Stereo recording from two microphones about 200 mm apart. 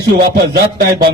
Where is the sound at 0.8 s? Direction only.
45° right (ahead or behind).